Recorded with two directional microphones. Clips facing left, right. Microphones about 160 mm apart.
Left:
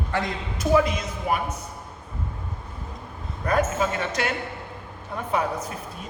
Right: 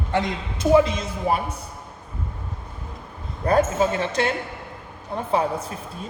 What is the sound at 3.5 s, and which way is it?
A woman's voice, 30° right (ahead or behind).